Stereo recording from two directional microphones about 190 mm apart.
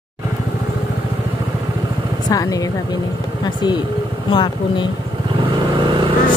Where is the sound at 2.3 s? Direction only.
20° left (ahead or behind).